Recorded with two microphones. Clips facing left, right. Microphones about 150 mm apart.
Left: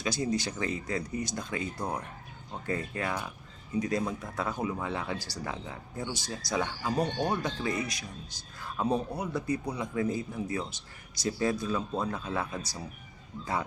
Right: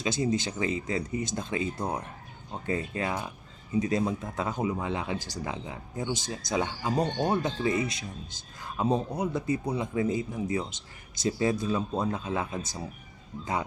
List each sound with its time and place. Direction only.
0.0 s speech: 20° right (ahead or behind)